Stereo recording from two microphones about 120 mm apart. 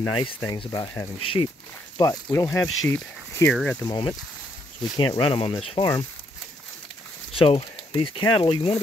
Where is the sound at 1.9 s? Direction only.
30° left (ahead or behind).